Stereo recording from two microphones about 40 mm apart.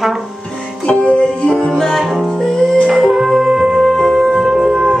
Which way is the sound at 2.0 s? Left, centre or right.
Centre.